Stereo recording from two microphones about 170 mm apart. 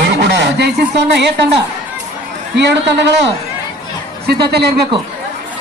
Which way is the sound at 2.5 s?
90° right.